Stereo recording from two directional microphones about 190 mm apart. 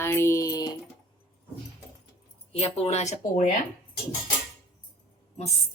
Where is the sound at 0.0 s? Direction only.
15° left (ahead or behind).